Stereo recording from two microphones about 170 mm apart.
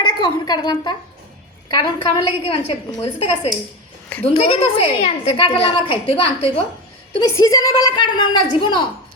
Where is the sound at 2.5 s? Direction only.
35° left (ahead or behind).